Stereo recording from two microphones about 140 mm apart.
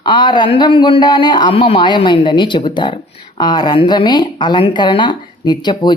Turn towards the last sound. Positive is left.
turn(degrees=30)  # may be behind; listen again after turning